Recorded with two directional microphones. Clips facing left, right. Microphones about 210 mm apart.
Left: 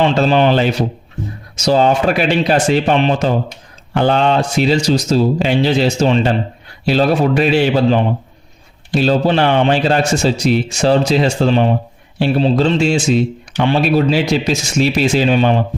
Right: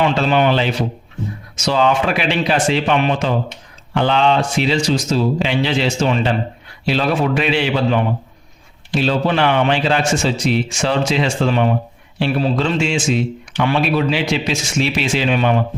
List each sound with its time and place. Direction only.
0.2 s speech: 35° left (ahead or behind)